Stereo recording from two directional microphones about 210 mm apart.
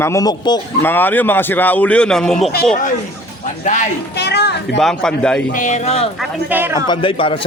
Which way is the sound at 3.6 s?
35° left (ahead or behind).